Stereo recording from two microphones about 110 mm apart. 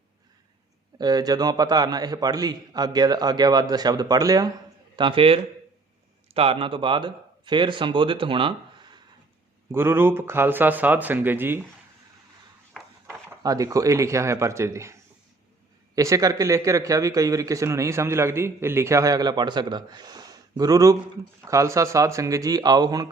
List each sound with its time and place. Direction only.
0.9 s a man's voice: 40° right (ahead or behind)
4.9 s a man's voice: 50° right (ahead or behind)
9.7 s speech: 20° right (ahead or behind)
12.7 s a sound: 5° left (ahead or behind)
13.4 s speech: 30° right (ahead or behind)
16.0 s a man's voice: 30° right (ahead or behind)